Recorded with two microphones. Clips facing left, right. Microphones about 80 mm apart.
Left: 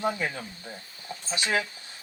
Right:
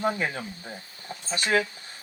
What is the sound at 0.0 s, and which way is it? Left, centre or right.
Speech, right.